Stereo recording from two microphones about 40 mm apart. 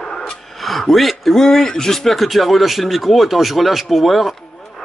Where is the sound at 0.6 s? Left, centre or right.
Centre.